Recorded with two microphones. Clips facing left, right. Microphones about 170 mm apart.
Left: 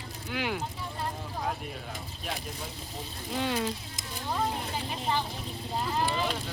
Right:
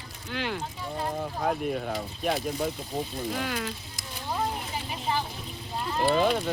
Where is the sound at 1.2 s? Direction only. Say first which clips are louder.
Right 6 dB; 55° right (ahead or behind).